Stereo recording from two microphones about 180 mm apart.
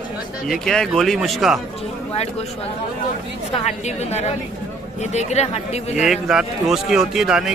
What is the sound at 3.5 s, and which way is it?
Speech, 40° left (ahead or behind).